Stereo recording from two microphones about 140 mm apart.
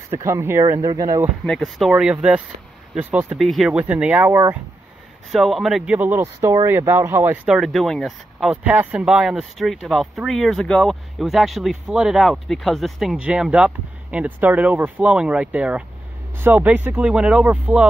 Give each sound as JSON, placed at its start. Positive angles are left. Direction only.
{"t": 0.1, "sound": "speech", "side_deg": -20}
{"t": 1.4, "sound": "speech", "side_deg": 0}
{"t": 3.3, "sound": "speech", "side_deg": 0}
{"t": 5.3, "sound": "speech", "side_deg": 0}
{"t": 5.9, "sound": "speech", "side_deg": -15}
{"t": 6.2, "sound": "speech", "side_deg": -25}
{"t": 7.4, "sound": "speech", "side_deg": -5}
{"t": 8.6, "sound": "speech", "side_deg": -10}